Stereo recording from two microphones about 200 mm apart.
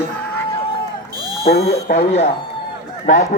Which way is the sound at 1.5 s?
30° left (ahead or behind).